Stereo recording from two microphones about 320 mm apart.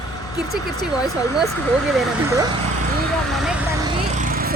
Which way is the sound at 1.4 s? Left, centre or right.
Centre.